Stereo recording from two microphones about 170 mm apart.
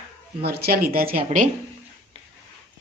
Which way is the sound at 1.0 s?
55° right (ahead or behind).